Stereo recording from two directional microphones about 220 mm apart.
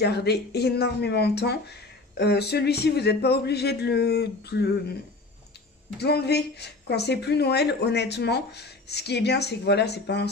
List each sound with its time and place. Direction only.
0.0 s a woman's voice: 50° left (ahead or behind)
5.9 s a woman's voice: 50° left (ahead or behind)